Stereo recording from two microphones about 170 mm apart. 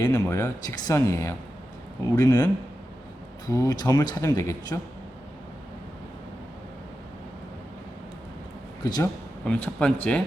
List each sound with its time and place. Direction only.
0.0 s speech: 20° left (ahead or behind)
8.8 s speech: 25° left (ahead or behind)
9.4 s speech: 5° left (ahead or behind)